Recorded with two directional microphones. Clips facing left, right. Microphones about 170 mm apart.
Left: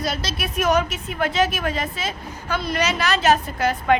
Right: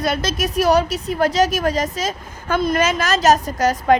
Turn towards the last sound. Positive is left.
turn(degrees=-40)  # may be behind; listen again after turning